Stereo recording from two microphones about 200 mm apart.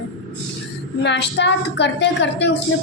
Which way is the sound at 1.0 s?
60° left (ahead or behind).